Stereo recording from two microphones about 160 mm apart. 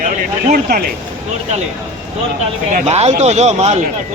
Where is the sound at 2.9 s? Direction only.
40° right (ahead or behind).